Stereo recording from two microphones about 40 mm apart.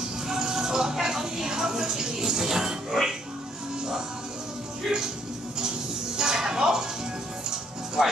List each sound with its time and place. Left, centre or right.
0.3 s music: centre
4.8 s music: centre
6.1 s a sound: centre
7.4 s music: centre